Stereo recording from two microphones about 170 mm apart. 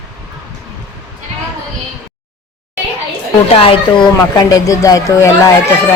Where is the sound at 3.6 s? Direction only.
35° left (ahead or behind).